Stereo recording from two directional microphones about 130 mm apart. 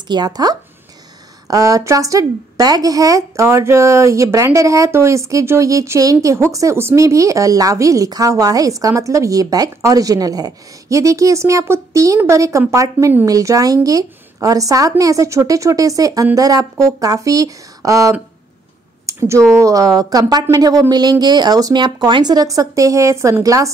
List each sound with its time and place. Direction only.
0.1 s a woman's voice: 30° right (ahead or behind)